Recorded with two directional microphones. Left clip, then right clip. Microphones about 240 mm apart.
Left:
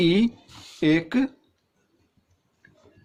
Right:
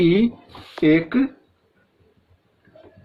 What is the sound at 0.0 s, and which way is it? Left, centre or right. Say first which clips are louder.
Speech: right 4 dB; left.